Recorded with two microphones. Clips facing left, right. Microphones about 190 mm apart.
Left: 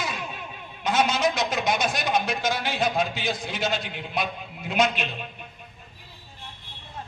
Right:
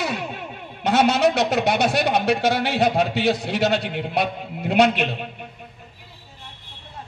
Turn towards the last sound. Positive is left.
turn(degrees=-65)  # may be behind; listen again after turning